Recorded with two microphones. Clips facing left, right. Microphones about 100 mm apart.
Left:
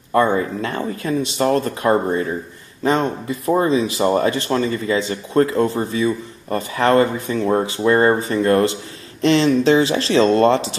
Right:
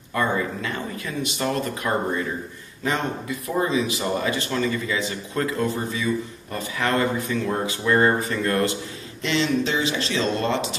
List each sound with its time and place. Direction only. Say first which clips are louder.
0.1 s speech: left 7 dB; 35° left (ahead or behind)